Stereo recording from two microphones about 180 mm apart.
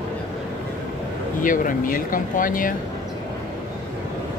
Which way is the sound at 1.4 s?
50° left (ahead or behind).